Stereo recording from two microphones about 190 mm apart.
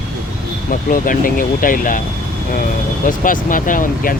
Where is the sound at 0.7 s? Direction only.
45° left (ahead or behind).